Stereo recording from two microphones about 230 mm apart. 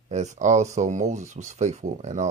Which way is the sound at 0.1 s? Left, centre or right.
Right.